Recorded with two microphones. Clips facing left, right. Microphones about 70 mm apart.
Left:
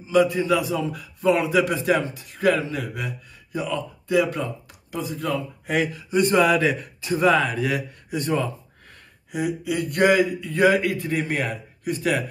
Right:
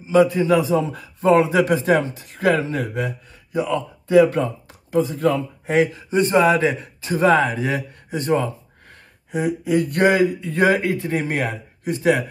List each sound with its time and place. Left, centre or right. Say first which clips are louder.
0.1 s a man's voice: right 4 dB; right